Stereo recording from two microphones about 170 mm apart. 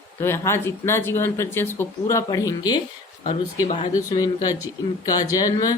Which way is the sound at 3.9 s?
20° left (ahead or behind).